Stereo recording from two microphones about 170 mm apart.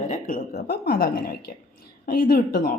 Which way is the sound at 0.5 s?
65° left (ahead or behind).